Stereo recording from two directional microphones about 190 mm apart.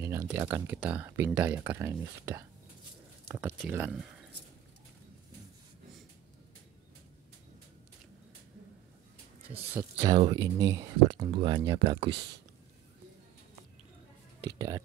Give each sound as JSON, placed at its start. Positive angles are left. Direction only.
{"t": 0.0, "sound": "speech", "side_deg": -15}
{"t": 9.5, "sound": "speech", "side_deg": -10}
{"t": 10.1, "sound": "speech", "side_deg": -25}